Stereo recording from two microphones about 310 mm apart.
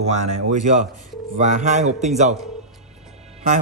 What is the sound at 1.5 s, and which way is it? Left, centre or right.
Speech, right.